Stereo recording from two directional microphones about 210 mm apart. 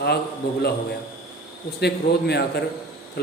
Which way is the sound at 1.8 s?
50° left (ahead or behind).